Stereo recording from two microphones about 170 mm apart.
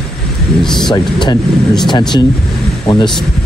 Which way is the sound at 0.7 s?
Centre (ahead or behind).